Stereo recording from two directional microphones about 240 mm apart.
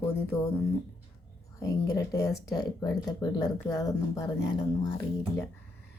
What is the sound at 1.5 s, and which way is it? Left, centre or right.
Speech, centre.